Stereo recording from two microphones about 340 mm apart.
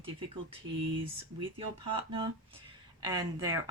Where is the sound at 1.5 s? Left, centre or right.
Centre.